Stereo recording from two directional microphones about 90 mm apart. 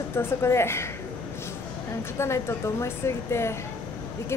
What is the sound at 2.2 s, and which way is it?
A woman's voice, 30° left (ahead or behind).